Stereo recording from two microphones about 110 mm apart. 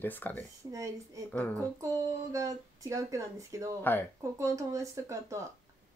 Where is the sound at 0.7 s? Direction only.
30° right (ahead or behind).